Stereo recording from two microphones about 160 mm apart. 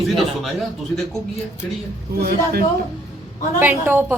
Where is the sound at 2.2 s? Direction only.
70° right (ahead or behind).